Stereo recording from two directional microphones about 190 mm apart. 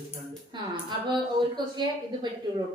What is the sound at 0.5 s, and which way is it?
A woman's voice, 25° right (ahead or behind).